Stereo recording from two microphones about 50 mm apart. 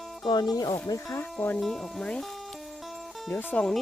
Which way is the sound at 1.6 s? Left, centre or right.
Centre.